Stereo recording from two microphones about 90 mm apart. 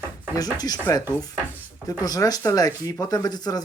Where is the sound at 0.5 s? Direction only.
45° left (ahead or behind).